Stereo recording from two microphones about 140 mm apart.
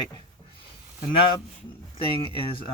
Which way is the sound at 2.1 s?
40° left (ahead or behind).